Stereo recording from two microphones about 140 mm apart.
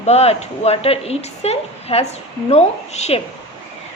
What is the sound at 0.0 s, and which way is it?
A woman's voice, 50° left (ahead or behind).